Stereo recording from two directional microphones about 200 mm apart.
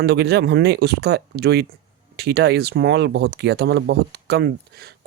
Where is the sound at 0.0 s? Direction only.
55° right (ahead or behind).